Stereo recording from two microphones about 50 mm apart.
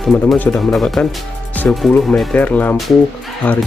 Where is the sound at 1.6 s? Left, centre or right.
Left.